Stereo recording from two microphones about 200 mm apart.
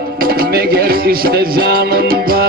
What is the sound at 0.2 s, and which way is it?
Music, 50° right (ahead or behind).